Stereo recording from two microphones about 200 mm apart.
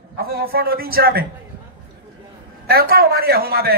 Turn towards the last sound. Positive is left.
turn(degrees=-50)  # may be behind; listen again after turning